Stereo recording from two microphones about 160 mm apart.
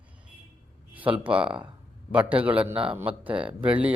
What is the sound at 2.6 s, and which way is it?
Speech, 35° right (ahead or behind).